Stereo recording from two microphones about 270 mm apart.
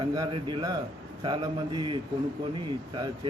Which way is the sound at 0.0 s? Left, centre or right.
Centre.